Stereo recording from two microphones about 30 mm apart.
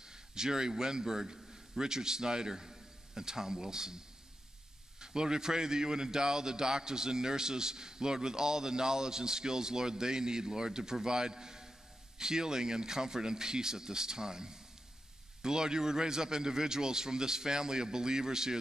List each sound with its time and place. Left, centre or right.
0.0 s a man's voice: right
5.0 s a man's voice: right